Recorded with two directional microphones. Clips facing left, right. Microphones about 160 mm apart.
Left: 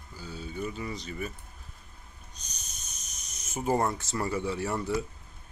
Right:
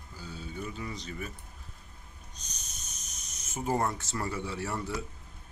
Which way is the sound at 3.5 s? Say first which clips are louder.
Left 3 dB; 15° left (ahead or behind).